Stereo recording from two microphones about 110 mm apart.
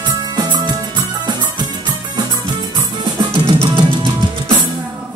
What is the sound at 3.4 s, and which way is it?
Music, 45° right (ahead or behind).